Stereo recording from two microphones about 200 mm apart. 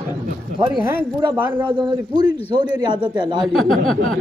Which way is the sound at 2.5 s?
20° right (ahead or behind).